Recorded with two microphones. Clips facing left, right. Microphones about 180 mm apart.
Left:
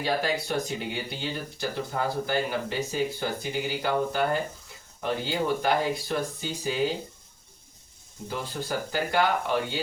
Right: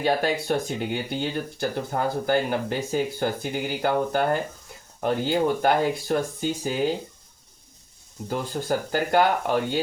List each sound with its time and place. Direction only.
0.0 s speech: 55° right (ahead or behind)
8.3 s speech: 50° right (ahead or behind)